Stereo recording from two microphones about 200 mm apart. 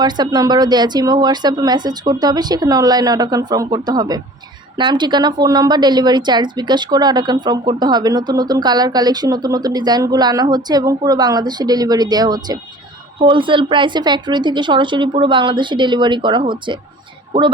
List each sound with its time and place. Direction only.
0.0 s a woman's voice: 20° right (ahead or behind)